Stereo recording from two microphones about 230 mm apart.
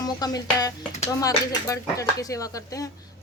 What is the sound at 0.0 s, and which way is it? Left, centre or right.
Speech, centre.